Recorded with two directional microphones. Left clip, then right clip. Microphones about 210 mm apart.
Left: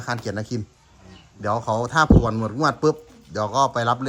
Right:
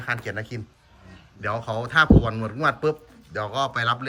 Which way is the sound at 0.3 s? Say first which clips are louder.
Left 3 dB; 30° left (ahead or behind).